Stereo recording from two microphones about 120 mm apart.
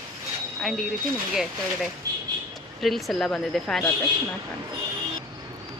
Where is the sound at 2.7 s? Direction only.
Centre (ahead or behind).